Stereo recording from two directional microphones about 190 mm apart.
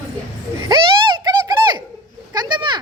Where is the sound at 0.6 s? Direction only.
20° right (ahead or behind).